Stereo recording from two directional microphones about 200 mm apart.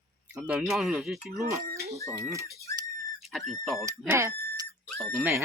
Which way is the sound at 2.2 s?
15° right (ahead or behind).